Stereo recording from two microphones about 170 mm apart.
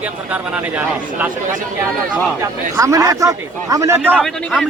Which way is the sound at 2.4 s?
20° right (ahead or behind).